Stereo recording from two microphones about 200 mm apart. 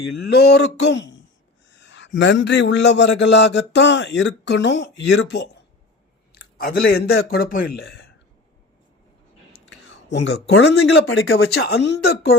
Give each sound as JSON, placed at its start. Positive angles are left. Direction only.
{"t": 0.3, "sound": "a man's voice", "side_deg": 55}
{"t": 6.3, "sound": "speech", "side_deg": 45}
{"t": 10.1, "sound": "a man's voice", "side_deg": 60}